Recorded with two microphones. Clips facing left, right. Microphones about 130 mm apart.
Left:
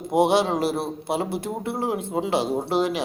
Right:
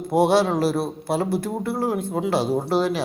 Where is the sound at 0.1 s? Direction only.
20° left (ahead or behind).